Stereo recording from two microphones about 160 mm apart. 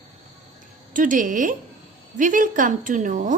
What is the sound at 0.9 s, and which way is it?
A woman's voice, 55° right (ahead or behind).